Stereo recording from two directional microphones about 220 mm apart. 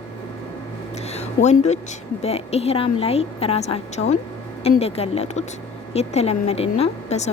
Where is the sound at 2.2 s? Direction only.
30° left (ahead or behind).